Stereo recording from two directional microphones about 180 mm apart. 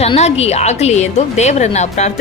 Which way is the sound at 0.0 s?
35° left (ahead or behind).